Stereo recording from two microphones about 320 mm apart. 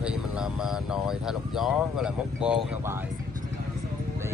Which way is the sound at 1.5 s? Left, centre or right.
Centre.